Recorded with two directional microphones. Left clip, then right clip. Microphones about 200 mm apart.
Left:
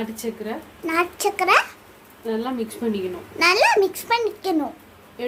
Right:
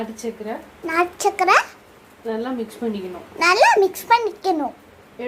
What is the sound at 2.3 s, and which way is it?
Speech, 40° left (ahead or behind).